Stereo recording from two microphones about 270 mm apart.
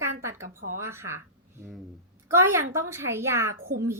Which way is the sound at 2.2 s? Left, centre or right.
Centre.